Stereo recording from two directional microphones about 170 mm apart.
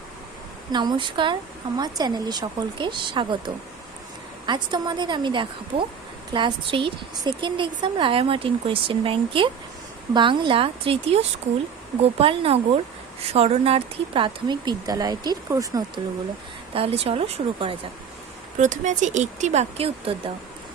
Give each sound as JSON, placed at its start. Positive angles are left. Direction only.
{"t": 0.7, "sound": "a woman's voice", "side_deg": -25}
{"t": 16.7, "sound": "a woman's voice", "side_deg": -35}
{"t": 18.6, "sound": "speech", "side_deg": -45}